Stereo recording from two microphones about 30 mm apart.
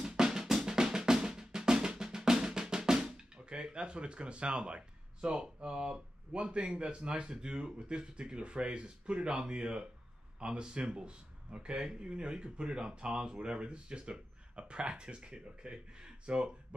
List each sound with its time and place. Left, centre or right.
0.2 s drum: right
3.2 s a sound: right
5.7 s speech: right
6.3 s speech: right
10.4 s speech: right